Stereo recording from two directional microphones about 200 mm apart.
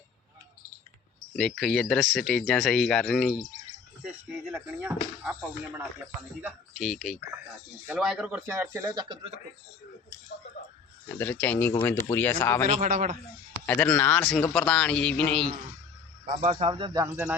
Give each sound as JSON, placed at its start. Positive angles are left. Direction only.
{"t": 1.4, "sound": "speech", "side_deg": 5}
{"t": 6.7, "sound": "speech", "side_deg": 5}
{"t": 11.2, "sound": "speech", "side_deg": 10}
{"t": 12.6, "sound": "a man's voice", "side_deg": -40}
{"t": 13.7, "sound": "speech", "side_deg": 10}
{"t": 16.2, "sound": "speech", "side_deg": -35}